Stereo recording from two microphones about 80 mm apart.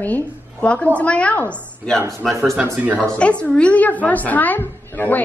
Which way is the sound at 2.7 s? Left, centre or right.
Centre.